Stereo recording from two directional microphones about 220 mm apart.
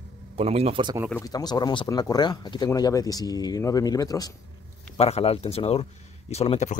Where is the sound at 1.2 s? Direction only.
15° left (ahead or behind).